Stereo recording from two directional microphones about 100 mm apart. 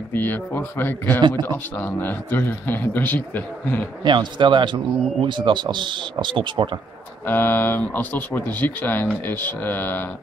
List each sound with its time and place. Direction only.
0.1 s a man's voice: 20° left (ahead or behind)
4.0 s speech: 50° right (ahead or behind)
7.2 s a man's voice: 20° left (ahead or behind)